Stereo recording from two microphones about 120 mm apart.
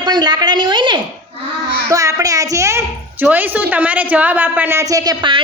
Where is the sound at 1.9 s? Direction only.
30° right (ahead or behind).